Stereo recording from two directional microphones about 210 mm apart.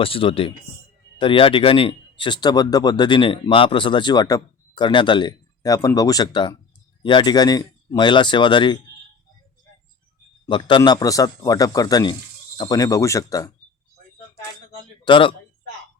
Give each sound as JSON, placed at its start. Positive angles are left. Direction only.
{"t": 0.0, "sound": "speech", "side_deg": 25}
{"t": 10.4, "sound": "a man's voice", "side_deg": 20}
{"t": 15.0, "sound": "speech", "side_deg": 25}